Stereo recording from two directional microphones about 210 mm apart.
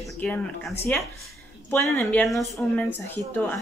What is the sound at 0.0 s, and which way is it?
A woman's voice, 5° left (ahead or behind).